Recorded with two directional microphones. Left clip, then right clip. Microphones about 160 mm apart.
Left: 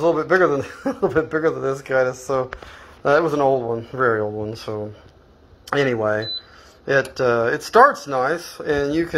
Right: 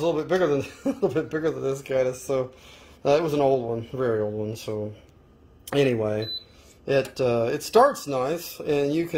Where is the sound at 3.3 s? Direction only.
25° left (ahead or behind).